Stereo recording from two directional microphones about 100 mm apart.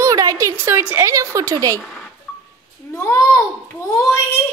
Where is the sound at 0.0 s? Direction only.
35° right (ahead or behind).